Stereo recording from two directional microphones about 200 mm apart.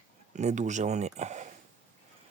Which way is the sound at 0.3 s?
35° right (ahead or behind).